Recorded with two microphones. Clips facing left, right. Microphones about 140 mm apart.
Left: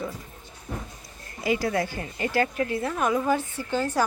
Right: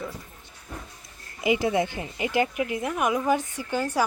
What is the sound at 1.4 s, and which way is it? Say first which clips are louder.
A woman's voice: right 2 dB; 20° right (ahead or behind).